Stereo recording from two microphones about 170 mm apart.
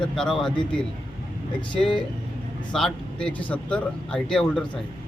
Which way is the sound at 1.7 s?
30° left (ahead or behind).